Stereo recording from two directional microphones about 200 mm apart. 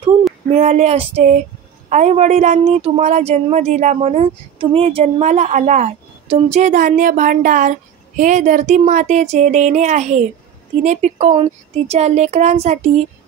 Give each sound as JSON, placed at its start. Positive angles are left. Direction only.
{"t": 0.5, "sound": "a woman's voice", "side_deg": -35}